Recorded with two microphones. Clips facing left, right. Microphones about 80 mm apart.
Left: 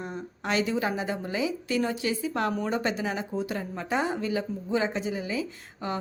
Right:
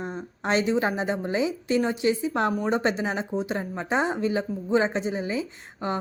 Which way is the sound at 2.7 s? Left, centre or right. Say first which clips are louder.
Right 3 dB; right.